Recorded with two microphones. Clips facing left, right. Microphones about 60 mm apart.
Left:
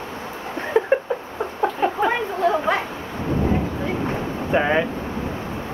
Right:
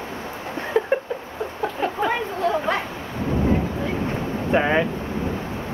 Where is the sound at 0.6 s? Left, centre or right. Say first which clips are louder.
Left 2 dB; centre.